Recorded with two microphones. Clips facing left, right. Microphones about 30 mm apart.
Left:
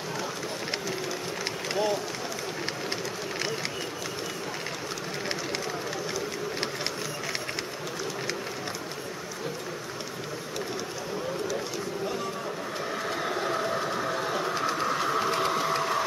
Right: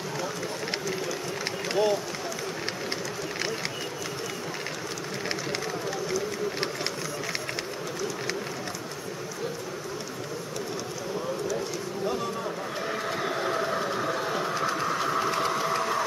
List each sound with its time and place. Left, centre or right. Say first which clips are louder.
1.7 s speech: right 3 dB; centre
12.9 s vehicle: even; centre